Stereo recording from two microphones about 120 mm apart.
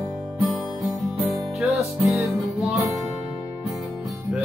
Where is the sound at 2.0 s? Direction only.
25° right (ahead or behind).